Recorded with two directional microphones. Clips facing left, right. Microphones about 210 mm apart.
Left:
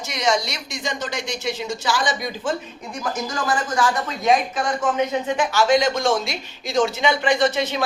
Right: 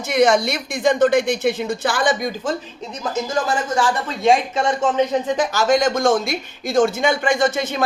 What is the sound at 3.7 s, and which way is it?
Speech, 30° right (ahead or behind).